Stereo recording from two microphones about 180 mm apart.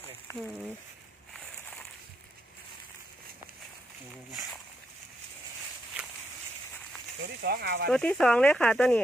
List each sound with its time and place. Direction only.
7.4 s speech: 65° right (ahead or behind)
7.9 s speech: 5° left (ahead or behind)